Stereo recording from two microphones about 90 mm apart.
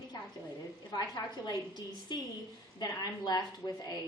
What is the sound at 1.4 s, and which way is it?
A woman's voice, 50° left (ahead or behind).